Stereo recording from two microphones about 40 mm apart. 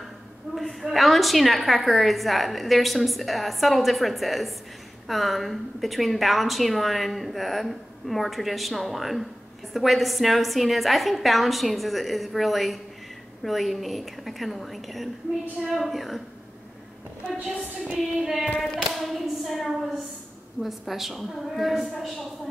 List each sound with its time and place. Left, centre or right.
0.6 s a sound: centre
0.8 s a woman's voice: centre
17.3 s a woman's voice: centre
17.8 s female singing: centre
18.9 s a woman's voice: centre